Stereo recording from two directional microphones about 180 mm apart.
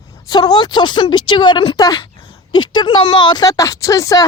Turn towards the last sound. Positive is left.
turn(degrees=20)  # may be behind; listen again after turning